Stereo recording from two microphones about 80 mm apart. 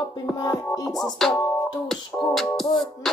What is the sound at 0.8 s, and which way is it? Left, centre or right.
Music, left.